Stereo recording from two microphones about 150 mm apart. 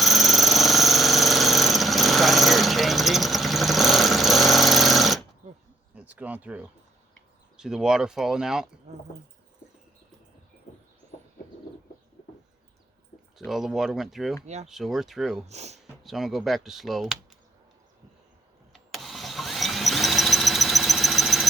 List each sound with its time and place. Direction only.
0.0 s jackhammer: centre (ahead or behind)
5.9 s speech: 10° right (ahead or behind)
13.4 s speech: centre (ahead or behind)
14.4 s speech: 45° right (ahead or behind)
14.7 s speech: centre (ahead or behind)
15.4 s speech: 45° right (ahead or behind)
16.0 s speech: centre (ahead or behind)
18.7 s engine: centre (ahead or behind)